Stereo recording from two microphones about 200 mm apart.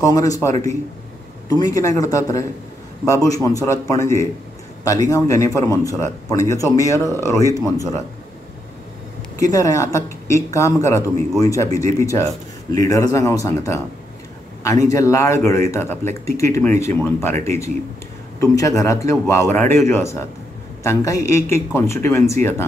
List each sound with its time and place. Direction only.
0.0 s speech: 15° left (ahead or behind)
9.4 s speech: 15° left (ahead or behind)
14.9 s speech: 15° left (ahead or behind)